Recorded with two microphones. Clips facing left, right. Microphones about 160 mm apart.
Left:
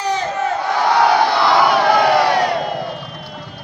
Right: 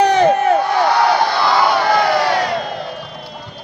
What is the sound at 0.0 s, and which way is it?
Crowd, 65° right (ahead or behind).